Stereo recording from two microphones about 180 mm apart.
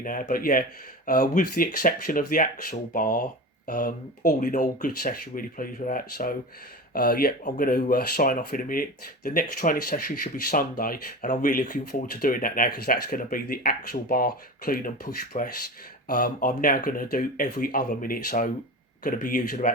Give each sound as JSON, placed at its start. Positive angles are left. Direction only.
{"t": 0.0, "sound": "speech", "side_deg": 50}